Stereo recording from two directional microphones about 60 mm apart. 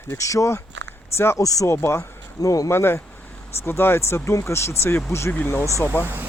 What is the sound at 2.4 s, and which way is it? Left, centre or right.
Speech, left.